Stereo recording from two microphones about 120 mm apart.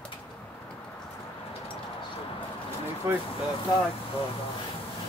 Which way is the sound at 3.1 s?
20° right (ahead or behind).